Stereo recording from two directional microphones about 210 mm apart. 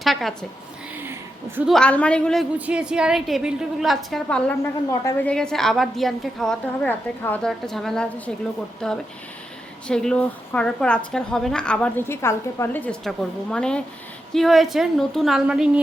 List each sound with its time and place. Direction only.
0.0 s a woman's voice: centre (ahead or behind)
1.5 s a woman's voice: centre (ahead or behind)